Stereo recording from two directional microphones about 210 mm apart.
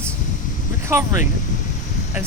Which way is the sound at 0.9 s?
10° right (ahead or behind).